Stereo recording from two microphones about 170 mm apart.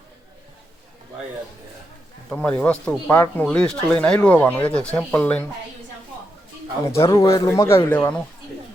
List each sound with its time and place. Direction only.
2.3 s speech: 5° left (ahead or behind)
6.8 s speech: 15° left (ahead or behind)